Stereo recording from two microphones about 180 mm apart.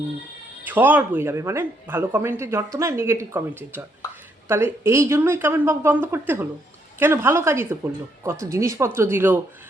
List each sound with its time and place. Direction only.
0.6 s speech: 10° right (ahead or behind)